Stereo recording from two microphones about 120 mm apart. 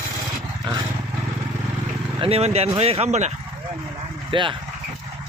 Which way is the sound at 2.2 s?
55° right (ahead or behind).